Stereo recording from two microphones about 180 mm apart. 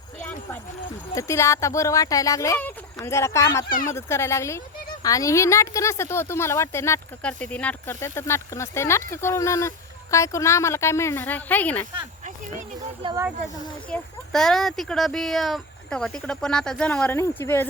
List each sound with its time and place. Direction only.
0.2 s a sound: 10° left (ahead or behind)
1.1 s speech: 15° left (ahead or behind)
13.0 s speech: 30° right (ahead or behind)
13.9 s speech: 5° left (ahead or behind)